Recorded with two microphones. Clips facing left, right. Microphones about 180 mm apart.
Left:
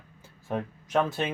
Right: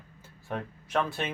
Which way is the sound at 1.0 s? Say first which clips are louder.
Left 3 dB; 15° left (ahead or behind).